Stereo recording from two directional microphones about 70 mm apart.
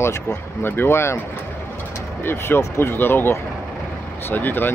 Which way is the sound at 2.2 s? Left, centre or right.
Left.